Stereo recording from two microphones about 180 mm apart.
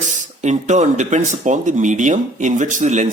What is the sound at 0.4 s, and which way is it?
A man's voice, 40° right (ahead or behind).